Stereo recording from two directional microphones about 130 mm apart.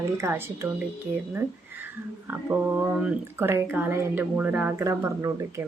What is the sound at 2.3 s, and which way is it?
Speech, 15° right (ahead or behind).